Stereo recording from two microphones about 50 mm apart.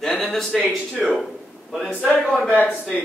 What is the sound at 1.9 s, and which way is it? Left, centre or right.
Speech, left.